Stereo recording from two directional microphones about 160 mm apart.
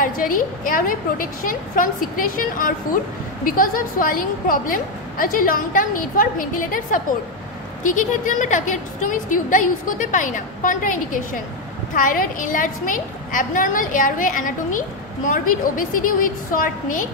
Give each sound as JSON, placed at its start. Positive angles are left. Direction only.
{"t": 0.0, "sound": "a woman's voice", "side_deg": 60}